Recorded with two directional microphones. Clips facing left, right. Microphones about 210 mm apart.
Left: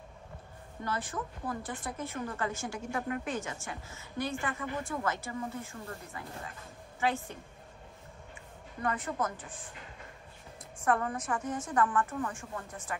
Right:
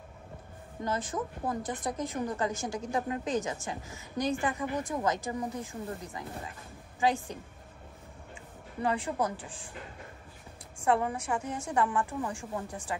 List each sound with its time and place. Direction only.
0.8 s a woman's voice: 20° right (ahead or behind)
1.8 s a woman's voice: 40° right (ahead or behind)
2.0 s a woman's voice: 20° right (ahead or behind)
8.8 s a woman's voice: 15° right (ahead or behind)
10.8 s a woman's voice: 10° right (ahead or behind)